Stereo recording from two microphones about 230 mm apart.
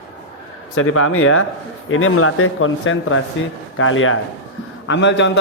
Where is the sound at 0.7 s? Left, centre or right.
Left.